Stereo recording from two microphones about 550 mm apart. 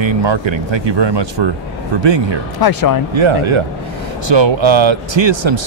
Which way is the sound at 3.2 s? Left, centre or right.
Right.